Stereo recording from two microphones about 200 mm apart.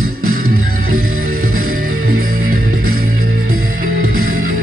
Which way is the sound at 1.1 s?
90° right.